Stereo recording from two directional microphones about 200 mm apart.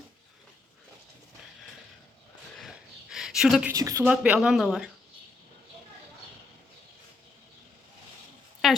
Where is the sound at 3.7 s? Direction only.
15° right (ahead or behind).